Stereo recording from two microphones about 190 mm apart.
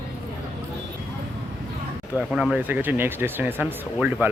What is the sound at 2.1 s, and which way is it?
Speech, centre (ahead or behind).